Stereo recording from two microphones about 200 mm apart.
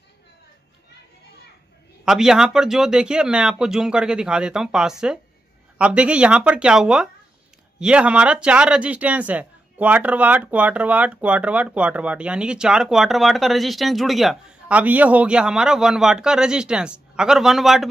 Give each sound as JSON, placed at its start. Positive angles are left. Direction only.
{"t": 2.0, "sound": "speech", "side_deg": -5}